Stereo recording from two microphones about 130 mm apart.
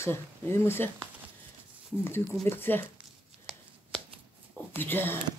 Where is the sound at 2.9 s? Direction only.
Centre (ahead or behind).